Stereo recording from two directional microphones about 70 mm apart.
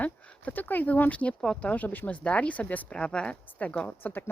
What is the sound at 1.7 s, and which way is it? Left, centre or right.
Speech, left.